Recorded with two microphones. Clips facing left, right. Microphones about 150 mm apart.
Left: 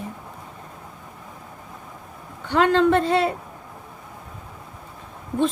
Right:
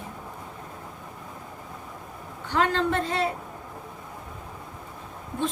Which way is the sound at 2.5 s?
75° left (ahead or behind).